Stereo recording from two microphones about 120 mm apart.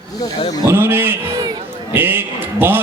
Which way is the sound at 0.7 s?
15° right (ahead or behind).